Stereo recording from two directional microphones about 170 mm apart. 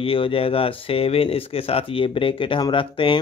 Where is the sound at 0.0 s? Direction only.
30° left (ahead or behind).